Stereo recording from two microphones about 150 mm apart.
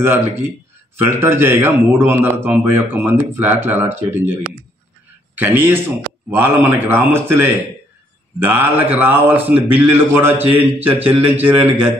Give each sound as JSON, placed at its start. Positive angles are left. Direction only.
{"t": 0.0, "sound": "a man's voice", "side_deg": -15}